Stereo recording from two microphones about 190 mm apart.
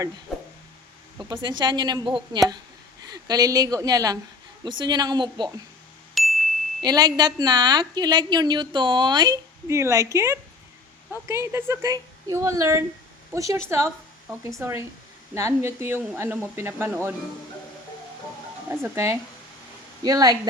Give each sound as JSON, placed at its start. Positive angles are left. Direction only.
{"t": 0.3, "sound": "a sound", "side_deg": 0}
{"t": 1.2, "sound": "a woman's voice", "side_deg": -25}
{"t": 6.2, "sound": "ding", "side_deg": 0}
{"t": 6.8, "sound": "a woman's voice", "side_deg": -20}
{"t": 18.7, "sound": "a woman's voice", "side_deg": -15}